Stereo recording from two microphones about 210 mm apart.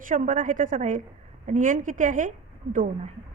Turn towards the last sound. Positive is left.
turn(degrees=-35)  # may be behind; listen again after turning